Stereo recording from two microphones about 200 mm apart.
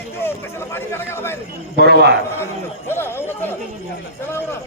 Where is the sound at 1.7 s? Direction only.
55° right (ahead or behind).